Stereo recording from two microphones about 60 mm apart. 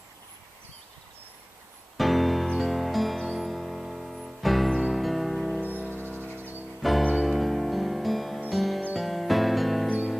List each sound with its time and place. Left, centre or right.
2.0 s music: centre
5.9 s music: right
6.8 s music: centre